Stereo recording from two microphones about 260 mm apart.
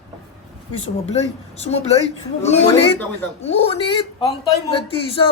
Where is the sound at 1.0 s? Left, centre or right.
Left.